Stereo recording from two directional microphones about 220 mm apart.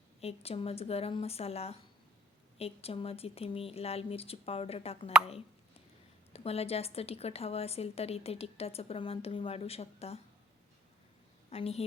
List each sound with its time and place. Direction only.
0.2 s a woman's voice: 25° left (ahead or behind)
6.3 s a woman's voice: 25° left (ahead or behind)
11.5 s a woman's voice: 25° left (ahead or behind)